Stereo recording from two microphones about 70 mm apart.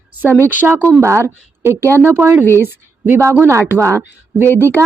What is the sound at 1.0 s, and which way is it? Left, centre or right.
A woman's voice, right.